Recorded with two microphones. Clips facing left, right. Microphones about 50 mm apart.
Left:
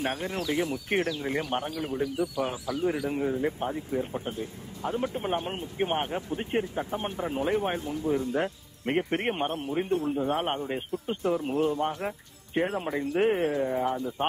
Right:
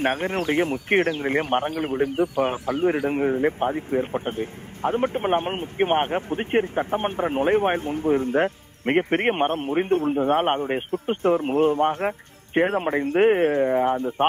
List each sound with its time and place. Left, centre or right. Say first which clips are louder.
0.0 s speech: right 7 dB; right